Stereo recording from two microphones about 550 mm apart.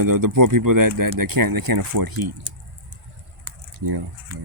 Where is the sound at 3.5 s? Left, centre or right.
Right.